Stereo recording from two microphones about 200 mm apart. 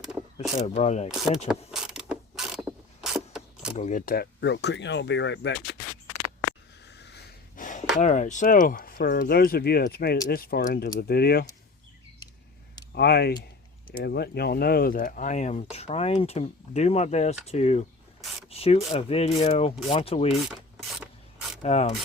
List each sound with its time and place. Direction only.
0.6 s speech: 35° left (ahead or behind)
1.1 s speech: centre (ahead or behind)
1.5 s mechanisms: 5° right (ahead or behind)
3.8 s speech: 40° left (ahead or behind); by 5.7 s 60° left (ahead or behind)
7.0 s a sound: 55° left (ahead or behind)
8.0 s speech: 35° left (ahead or behind)
12.9 s speech: 55° left (ahead or behind); by 20.2 s 30° left (ahead or behind)
21.0 s rub: centre (ahead or behind)
21.6 s speech: 35° left (ahead or behind)